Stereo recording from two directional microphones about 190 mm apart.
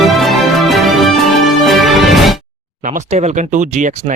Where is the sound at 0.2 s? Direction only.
Centre (ahead or behind).